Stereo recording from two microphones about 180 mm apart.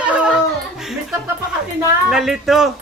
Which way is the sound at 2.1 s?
5° right (ahead or behind).